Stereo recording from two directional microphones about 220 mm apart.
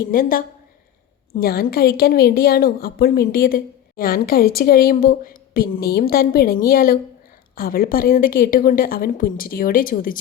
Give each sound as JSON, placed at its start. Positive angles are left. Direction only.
{"t": 0.0, "sound": "a woman's voice", "side_deg": 40}